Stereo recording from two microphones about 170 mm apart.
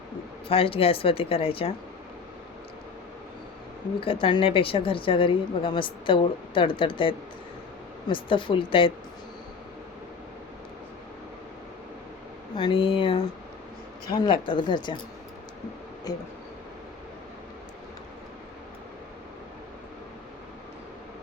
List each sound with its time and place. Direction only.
0.4 s a woman's voice: 35° left (ahead or behind)
4.0 s a woman's voice: 30° left (ahead or behind)
12.5 s speech: 30° left (ahead or behind)
16.1 s speech: 20° left (ahead or behind)